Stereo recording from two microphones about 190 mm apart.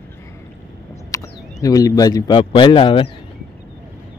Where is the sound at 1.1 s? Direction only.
20° left (ahead or behind).